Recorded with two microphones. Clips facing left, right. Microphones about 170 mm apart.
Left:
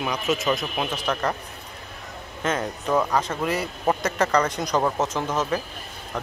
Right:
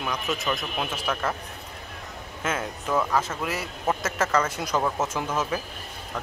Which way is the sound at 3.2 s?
5° right (ahead or behind).